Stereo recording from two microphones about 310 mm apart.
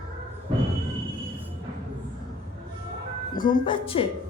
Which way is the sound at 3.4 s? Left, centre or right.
Centre.